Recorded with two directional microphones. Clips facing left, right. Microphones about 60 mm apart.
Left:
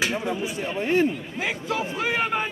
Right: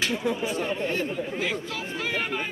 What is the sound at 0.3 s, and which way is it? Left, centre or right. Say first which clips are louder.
Speech: right 1 dB; centre.